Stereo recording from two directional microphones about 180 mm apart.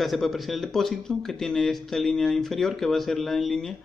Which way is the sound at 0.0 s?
Centre (ahead or behind).